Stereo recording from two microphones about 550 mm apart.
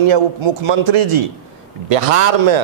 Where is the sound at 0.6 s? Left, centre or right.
Right.